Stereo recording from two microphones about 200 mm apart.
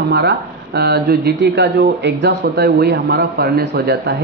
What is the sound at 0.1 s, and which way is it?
Speech, 55° right (ahead or behind).